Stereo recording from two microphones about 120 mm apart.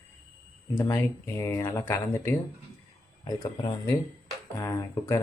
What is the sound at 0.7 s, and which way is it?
Speech, 20° left (ahead or behind).